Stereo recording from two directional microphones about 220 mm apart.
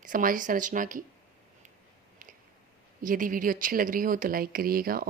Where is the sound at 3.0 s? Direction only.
40° right (ahead or behind).